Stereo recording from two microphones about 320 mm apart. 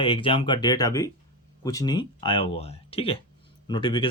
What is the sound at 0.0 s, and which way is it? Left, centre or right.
Speech, centre.